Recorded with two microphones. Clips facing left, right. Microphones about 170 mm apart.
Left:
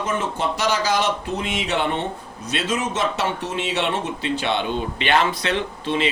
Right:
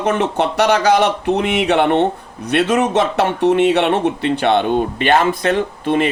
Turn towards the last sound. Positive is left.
turn(degrees=-55)  # may be behind; listen again after turning